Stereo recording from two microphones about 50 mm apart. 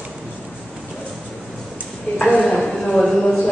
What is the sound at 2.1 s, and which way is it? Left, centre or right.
Speech, left.